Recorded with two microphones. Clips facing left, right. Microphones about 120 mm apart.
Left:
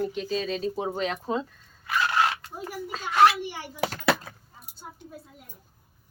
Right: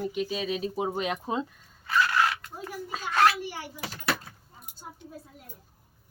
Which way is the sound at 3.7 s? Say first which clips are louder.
Left 8 dB; 75° left (ahead or behind).